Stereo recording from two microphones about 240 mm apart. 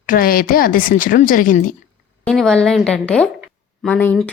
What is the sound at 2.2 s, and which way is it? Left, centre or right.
Speech, centre.